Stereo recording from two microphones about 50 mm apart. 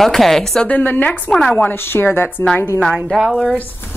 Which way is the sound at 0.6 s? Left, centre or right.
Left.